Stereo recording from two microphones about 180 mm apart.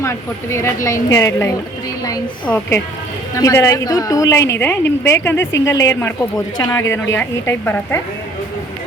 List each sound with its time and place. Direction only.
0.0 s a woman's voice: 15° left (ahead or behind)